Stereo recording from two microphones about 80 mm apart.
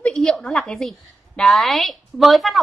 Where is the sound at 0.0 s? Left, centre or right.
Centre.